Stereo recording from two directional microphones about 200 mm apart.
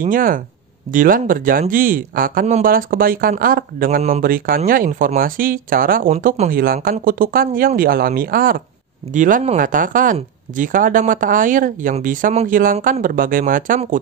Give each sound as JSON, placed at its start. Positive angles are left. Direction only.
{"t": 0.0, "sound": "speech", "side_deg": -45}